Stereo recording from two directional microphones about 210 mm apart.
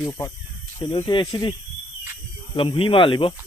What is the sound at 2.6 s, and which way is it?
Speech, 25° left (ahead or behind).